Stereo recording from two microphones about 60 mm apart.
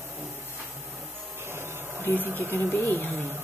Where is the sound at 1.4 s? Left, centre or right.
Right.